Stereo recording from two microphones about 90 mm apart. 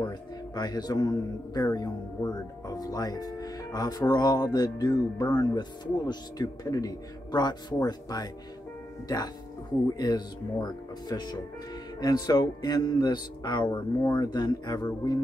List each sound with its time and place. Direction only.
0.6 s speech: 50° left (ahead or behind)
14.0 s speech: 45° left (ahead or behind)